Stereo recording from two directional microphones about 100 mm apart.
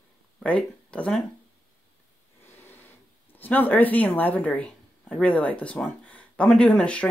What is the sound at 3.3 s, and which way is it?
Speech, 20° left (ahead or behind).